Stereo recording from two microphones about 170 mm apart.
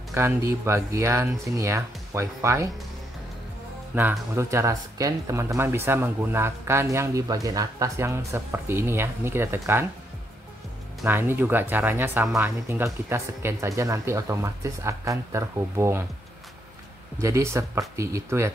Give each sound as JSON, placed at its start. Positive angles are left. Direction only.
{"t": 0.1, "sound": "speech", "side_deg": -15}
{"t": 3.9, "sound": "speech", "side_deg": -10}
{"t": 11.1, "sound": "speech", "side_deg": -10}
{"t": 17.2, "sound": "speech", "side_deg": -15}